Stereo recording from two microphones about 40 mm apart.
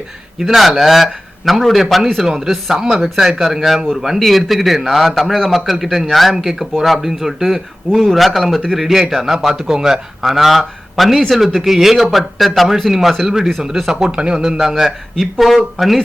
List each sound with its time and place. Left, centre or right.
0.3 s speech: centre
14.1 s speech: right
14.3 s speech: centre